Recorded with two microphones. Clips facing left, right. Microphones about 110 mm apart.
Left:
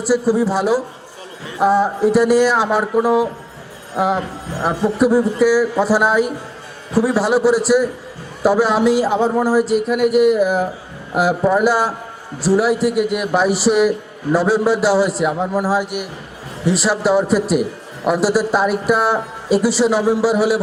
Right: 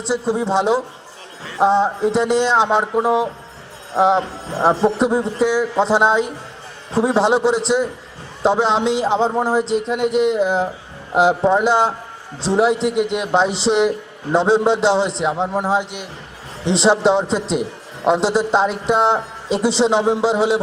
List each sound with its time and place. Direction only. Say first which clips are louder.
0.0 s a man's voice: left 4 dB; 25° right (ahead or behind)